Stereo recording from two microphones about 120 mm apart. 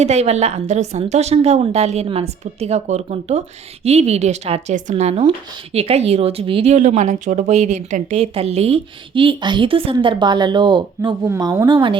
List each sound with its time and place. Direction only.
0.0 s a woman's voice: 65° right (ahead or behind)
6.7 s speech: 80° right; by 11.5 s 30° right (ahead or behind)
11.7 s speech: 45° right (ahead or behind)